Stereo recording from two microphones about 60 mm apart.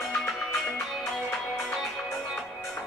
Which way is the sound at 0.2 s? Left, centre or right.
Centre.